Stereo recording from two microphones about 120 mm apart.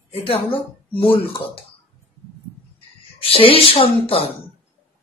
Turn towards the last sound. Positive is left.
turn(degrees=50)  # may be behind; listen again after turning